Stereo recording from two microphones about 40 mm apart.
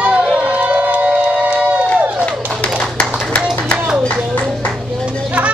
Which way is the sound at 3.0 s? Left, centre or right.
Left.